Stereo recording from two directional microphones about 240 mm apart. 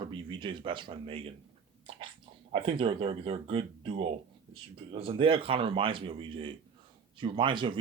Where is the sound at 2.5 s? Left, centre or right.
Right.